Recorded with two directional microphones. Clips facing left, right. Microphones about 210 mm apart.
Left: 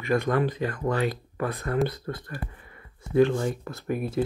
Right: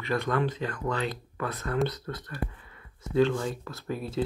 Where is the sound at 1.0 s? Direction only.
50° left (ahead or behind).